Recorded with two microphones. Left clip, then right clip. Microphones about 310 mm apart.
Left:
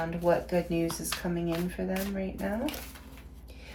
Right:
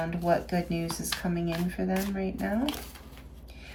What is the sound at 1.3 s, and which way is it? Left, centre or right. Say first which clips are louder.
Speech: even; centre.